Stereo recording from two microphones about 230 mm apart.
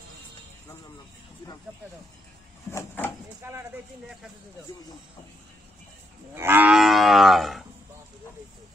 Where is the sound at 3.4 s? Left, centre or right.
Centre.